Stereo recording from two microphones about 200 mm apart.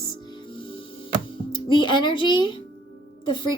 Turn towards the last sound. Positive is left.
turn(degrees=25)  # may be behind; listen again after turning